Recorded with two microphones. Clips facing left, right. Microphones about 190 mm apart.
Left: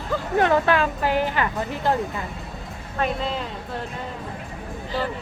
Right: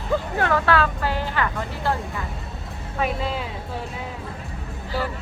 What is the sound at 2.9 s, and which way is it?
Speech, 5° right (ahead or behind).